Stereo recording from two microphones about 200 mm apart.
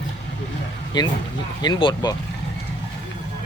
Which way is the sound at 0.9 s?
20° left (ahead or behind).